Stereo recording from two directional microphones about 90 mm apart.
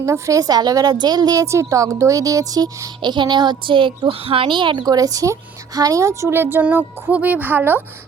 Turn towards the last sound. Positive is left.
turn(degrees=-20)  # may be behind; listen again after turning